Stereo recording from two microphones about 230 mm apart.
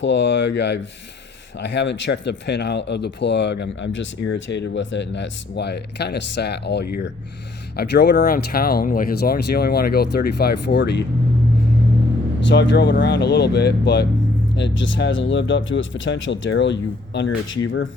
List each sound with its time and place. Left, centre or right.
0.0 s speech: left
12.5 s speech: left